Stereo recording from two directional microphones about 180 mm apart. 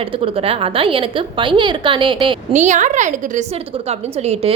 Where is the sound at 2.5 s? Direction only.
40° right (ahead or behind).